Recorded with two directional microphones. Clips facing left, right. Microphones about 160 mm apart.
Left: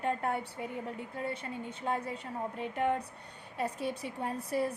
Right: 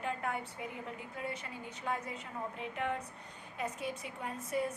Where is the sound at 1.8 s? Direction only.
30° left (ahead or behind).